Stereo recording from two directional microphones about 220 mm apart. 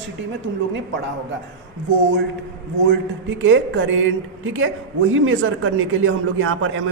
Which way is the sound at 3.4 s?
60° right (ahead or behind).